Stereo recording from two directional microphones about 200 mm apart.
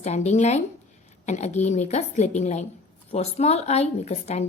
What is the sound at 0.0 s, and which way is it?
A woman's voice, 35° left (ahead or behind).